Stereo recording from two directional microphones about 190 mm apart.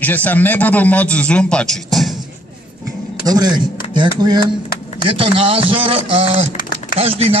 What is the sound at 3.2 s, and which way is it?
A man's voice, 20° right (ahead or behind).